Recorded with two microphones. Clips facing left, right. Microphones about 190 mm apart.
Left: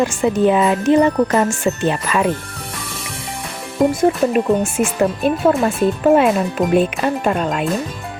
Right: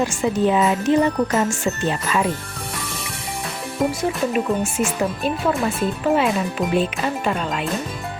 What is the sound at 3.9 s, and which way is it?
Speech, 50° left (ahead or behind).